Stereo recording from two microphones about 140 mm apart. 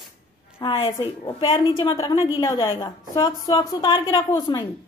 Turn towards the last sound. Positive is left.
turn(degrees=30)  # may be behind; listen again after turning